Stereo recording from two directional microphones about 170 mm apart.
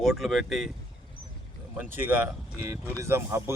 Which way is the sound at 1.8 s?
10° right (ahead or behind).